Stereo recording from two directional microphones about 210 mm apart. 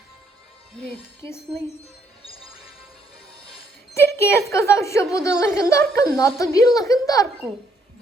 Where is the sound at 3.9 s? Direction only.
10° left (ahead or behind).